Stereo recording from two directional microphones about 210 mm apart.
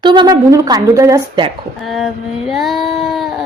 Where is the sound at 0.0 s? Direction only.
20° right (ahead or behind).